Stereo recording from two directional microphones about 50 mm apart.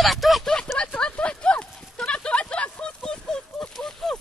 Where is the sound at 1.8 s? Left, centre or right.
Centre.